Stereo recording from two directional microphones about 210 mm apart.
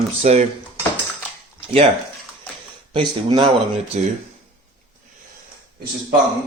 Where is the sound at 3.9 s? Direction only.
35° right (ahead or behind).